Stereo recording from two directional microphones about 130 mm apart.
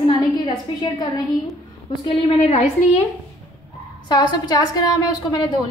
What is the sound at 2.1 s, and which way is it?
Speech, 55° left (ahead or behind).